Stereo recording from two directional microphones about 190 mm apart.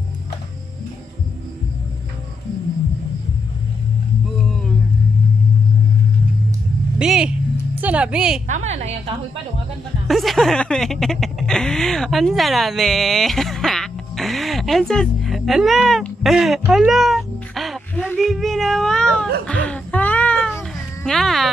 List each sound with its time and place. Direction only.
4.4 s a sound: 5° left (ahead or behind)
7.0 s vehicle: 5° right (ahead or behind)
7.8 s a woman's voice: 5° right (ahead or behind)
8.5 s a woman's voice: 40° right (ahead or behind)
10.0 s snicker: centre (ahead or behind)